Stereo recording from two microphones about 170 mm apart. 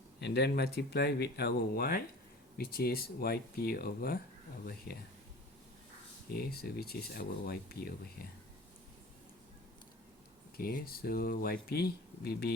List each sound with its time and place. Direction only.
0.2 s speech: 70° left (ahead or behind)
6.3 s speech: 65° left (ahead or behind)
10.6 s speech: 60° left (ahead or behind)